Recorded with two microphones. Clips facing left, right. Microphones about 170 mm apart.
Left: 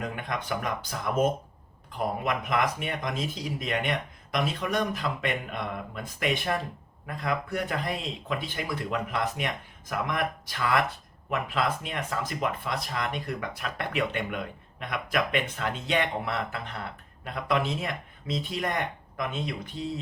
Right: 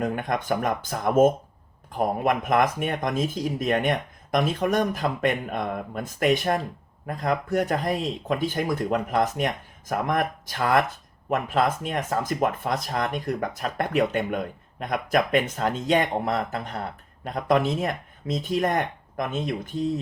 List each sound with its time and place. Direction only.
0.0 s speech: 45° right (ahead or behind)